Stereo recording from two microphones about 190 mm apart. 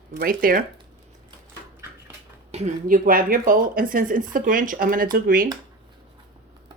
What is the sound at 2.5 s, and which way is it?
Speech, 40° right (ahead or behind).